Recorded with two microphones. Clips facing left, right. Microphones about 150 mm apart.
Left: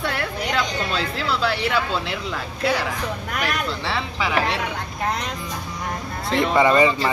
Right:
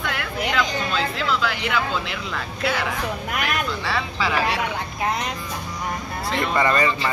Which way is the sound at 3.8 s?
25° left (ahead or behind).